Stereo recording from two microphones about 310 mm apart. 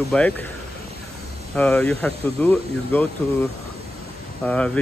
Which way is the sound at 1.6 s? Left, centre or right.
Centre.